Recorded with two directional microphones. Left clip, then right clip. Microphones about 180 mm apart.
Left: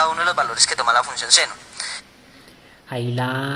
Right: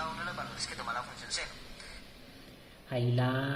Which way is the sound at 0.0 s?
45° left (ahead or behind).